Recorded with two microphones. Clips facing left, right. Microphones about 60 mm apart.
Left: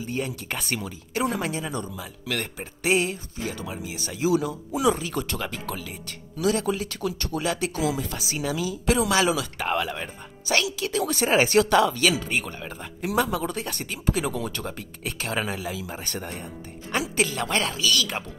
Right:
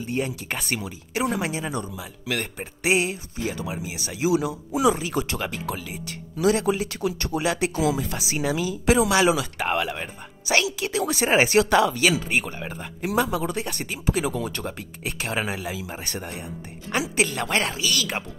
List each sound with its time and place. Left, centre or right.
0.0 s speech: centre
6.4 s speech: right
9.6 s speech: centre
13.0 s speech: centre
15.0 s speech: centre
17.6 s speech: right